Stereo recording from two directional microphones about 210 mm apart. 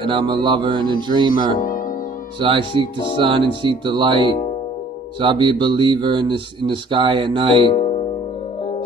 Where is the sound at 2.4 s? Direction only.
25° right (ahead or behind).